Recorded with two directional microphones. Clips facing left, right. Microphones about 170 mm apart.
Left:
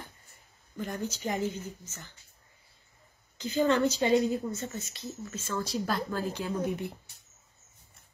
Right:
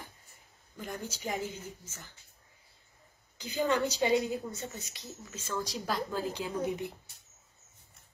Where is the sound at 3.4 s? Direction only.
10° right (ahead or behind).